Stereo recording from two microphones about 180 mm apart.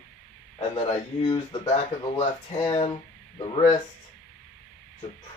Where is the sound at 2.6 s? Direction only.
35° left (ahead or behind).